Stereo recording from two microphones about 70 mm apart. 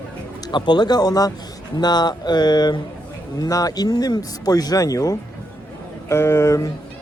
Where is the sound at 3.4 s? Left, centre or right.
Left.